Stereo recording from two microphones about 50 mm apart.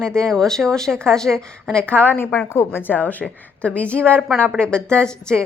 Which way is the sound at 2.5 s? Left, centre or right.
Left.